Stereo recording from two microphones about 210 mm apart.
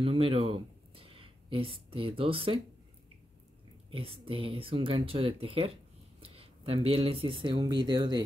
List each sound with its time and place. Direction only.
0.0 s speech: 25° right (ahead or behind)
3.9 s speech: 25° right (ahead or behind)